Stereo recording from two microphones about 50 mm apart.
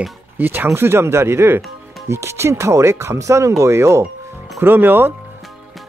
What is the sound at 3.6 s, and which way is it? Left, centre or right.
Speech, right.